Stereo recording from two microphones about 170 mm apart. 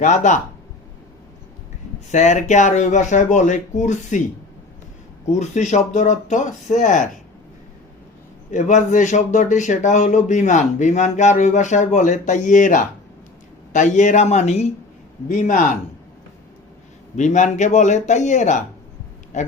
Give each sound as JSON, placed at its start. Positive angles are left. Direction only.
{"t": 0.0, "sound": "speech", "side_deg": 45}
{"t": 2.1, "sound": "speech", "side_deg": 45}
{"t": 5.2, "sound": "speech", "side_deg": 45}
{"t": 8.4, "sound": "speech", "side_deg": 45}
{"t": 17.2, "sound": "speech", "side_deg": 45}